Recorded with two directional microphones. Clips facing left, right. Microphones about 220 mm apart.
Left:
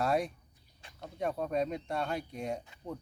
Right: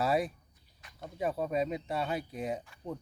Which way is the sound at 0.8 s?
30° left (ahead or behind).